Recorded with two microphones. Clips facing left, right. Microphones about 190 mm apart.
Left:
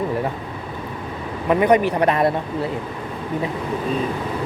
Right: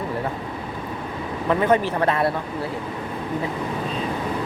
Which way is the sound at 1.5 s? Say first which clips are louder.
Left 4 dB; 15° left (ahead or behind).